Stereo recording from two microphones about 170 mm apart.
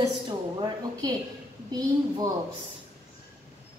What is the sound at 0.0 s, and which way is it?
A woman's voice, 25° right (ahead or behind).